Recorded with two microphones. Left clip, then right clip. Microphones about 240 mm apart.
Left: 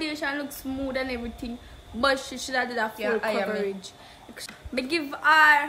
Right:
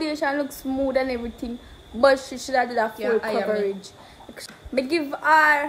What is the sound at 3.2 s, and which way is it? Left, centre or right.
Speech, left.